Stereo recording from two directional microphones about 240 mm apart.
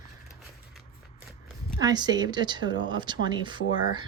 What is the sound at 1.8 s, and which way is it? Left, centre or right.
A woman's voice, centre.